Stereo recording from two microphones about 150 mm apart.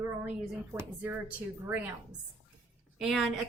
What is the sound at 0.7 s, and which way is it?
Speech, 15° right (ahead or behind).